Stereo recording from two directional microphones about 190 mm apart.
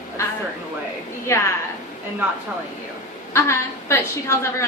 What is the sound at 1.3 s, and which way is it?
Speech, 15° left (ahead or behind).